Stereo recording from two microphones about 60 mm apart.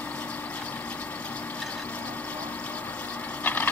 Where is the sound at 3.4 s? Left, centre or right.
Left.